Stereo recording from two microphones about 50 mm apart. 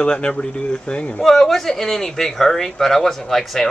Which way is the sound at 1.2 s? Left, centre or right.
Centre.